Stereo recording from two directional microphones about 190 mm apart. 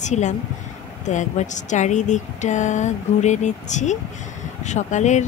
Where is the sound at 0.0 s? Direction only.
40° left (ahead or behind).